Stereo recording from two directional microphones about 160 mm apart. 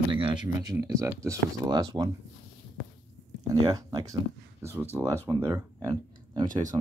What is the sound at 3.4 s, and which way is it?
Speech, 25° right (ahead or behind).